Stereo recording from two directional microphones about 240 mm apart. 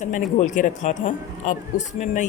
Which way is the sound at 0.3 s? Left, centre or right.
Left.